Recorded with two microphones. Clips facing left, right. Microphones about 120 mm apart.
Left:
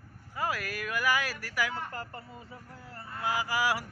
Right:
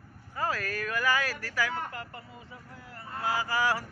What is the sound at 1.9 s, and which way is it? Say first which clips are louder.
Speech: left 1 dB; 40° left (ahead or behind).